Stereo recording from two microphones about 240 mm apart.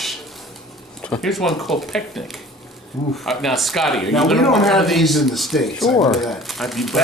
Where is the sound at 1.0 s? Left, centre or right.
Centre.